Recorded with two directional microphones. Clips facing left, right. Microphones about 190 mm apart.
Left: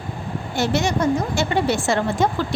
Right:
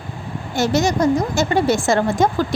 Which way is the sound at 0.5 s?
40° right (ahead or behind).